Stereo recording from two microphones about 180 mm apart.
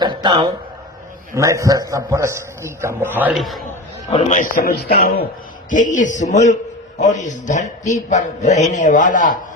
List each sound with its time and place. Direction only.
0.0 s a sound: 25° right (ahead or behind)
1.4 s a man's voice: 15° right (ahead or behind); by 3.6 s centre (ahead or behind)
4.3 s a man's voice: 50° left (ahead or behind)
5.7 s a man's voice: 45° left (ahead or behind)